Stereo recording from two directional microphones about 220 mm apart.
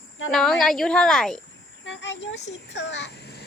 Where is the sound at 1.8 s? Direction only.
55° left (ahead or behind).